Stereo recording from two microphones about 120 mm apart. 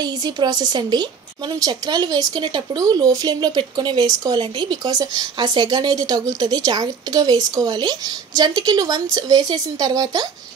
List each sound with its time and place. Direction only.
0.0 s a woman's voice: 35° right (ahead or behind)